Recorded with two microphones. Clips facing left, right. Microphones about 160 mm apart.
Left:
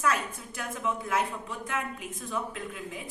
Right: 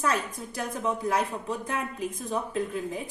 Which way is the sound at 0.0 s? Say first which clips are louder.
Right 1 dB; 35° right (ahead or behind).